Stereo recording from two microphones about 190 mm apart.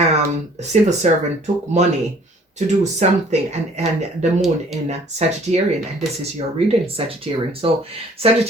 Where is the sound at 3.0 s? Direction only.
40° right (ahead or behind).